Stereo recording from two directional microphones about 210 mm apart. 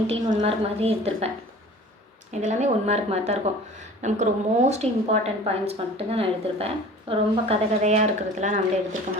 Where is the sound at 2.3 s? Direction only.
35° right (ahead or behind).